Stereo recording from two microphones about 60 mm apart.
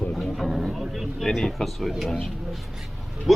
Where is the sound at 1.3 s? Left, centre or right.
Centre.